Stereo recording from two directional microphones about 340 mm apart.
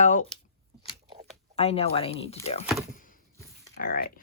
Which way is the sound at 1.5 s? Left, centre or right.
Centre.